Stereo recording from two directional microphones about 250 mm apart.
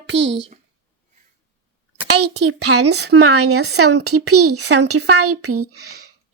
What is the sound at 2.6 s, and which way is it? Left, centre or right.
A woman's voice, right.